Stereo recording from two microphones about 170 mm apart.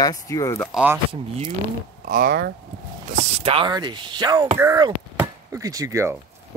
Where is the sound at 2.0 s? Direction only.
55° right (ahead or behind).